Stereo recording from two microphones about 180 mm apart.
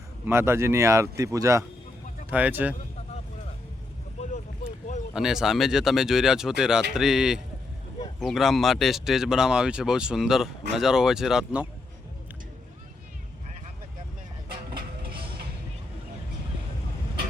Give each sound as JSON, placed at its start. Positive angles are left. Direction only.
{"t": 0.3, "sound": "speech", "side_deg": -15}
{"t": 4.2, "sound": "a sound", "side_deg": 40}
{"t": 5.1, "sound": "speech", "side_deg": -5}